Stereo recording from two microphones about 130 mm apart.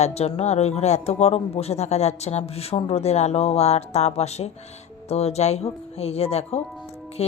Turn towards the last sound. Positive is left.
turn(degrees=50)  # may be behind; listen again after turning